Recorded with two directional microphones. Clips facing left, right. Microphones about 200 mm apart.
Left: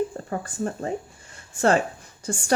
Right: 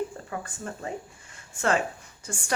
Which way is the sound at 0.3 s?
35° left (ahead or behind).